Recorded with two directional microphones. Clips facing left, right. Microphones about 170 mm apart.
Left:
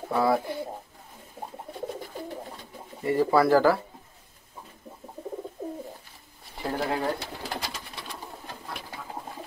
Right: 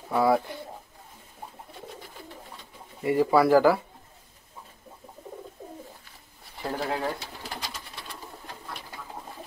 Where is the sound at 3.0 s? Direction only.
10° right (ahead or behind).